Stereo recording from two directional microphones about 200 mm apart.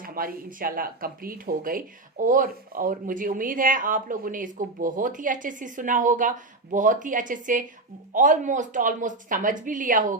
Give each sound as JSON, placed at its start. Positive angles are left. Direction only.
{"t": 0.0, "sound": "speech", "side_deg": -45}